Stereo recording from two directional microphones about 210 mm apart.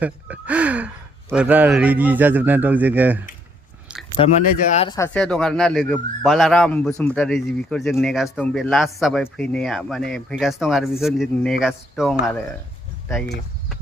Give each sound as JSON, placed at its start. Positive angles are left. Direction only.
{"t": 0.0, "sound": "a man's voice", "side_deg": -5}
{"t": 4.2, "sound": "speech", "side_deg": 30}
{"t": 4.9, "sound": "speech", "side_deg": 10}